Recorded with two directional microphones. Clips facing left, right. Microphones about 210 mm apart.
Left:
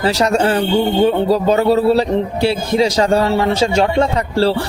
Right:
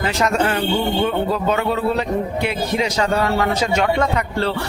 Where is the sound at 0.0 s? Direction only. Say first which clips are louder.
Left 4 dB; 35° left (ahead or behind).